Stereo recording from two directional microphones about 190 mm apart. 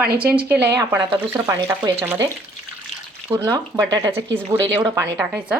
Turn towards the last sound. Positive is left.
turn(degrees=-10)  # may be behind; listen again after turning